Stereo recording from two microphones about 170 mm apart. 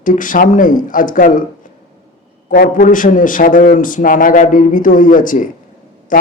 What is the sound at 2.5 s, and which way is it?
Speech, 60° left (ahead or behind).